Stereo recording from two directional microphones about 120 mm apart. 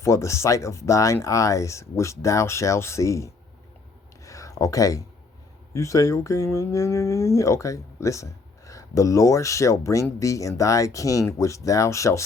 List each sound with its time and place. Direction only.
0.0 s speech: 25° left (ahead or behind)
4.2 s a sound: 30° left (ahead or behind)
5.7 s speech: 25° left (ahead or behind)